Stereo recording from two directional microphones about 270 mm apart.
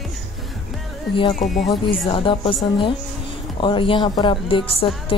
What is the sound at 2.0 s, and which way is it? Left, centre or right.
Speech, centre.